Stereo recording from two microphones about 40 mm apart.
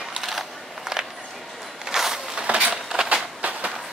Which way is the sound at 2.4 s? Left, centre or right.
Right.